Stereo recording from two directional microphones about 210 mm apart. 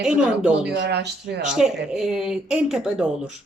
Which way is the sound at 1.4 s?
5° right (ahead or behind).